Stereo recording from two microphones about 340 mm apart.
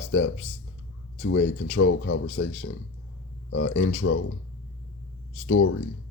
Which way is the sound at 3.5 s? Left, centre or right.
Left.